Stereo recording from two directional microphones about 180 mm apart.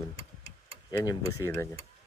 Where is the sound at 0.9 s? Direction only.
20° left (ahead or behind).